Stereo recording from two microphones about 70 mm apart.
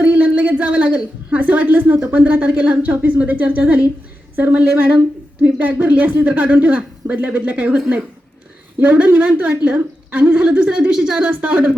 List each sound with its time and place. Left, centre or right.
0.0 s a woman's voice: right
8.8 s a woman's voice: centre
11.2 s speech: right